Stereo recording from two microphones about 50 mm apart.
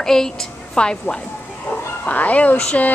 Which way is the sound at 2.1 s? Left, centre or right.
Left.